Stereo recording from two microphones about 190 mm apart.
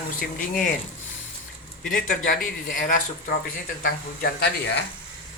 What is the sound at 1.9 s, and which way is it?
A man's voice, 45° left (ahead or behind).